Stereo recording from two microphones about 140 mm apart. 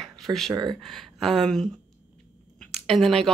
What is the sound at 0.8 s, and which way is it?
Speech, centre (ahead or behind).